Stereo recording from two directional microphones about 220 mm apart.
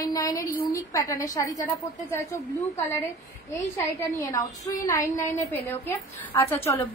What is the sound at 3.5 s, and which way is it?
A woman's voice, 15° left (ahead or behind).